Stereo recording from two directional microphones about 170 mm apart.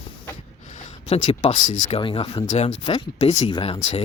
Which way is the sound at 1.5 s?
50° left (ahead or behind).